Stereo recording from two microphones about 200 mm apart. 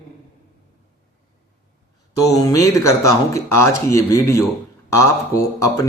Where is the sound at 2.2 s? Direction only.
15° left (ahead or behind).